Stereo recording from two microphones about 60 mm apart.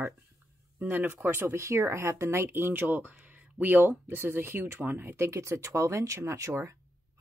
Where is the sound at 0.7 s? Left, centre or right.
Right.